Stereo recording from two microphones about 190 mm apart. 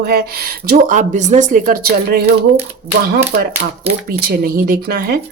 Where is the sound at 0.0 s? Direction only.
55° right (ahead or behind).